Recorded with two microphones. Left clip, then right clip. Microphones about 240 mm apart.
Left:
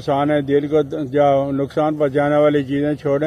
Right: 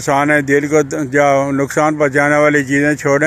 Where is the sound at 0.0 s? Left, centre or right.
Centre.